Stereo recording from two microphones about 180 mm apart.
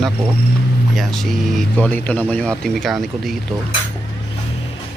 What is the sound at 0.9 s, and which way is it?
Speech, centre (ahead or behind).